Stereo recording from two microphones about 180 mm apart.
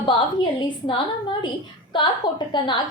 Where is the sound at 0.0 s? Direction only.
25° left (ahead or behind).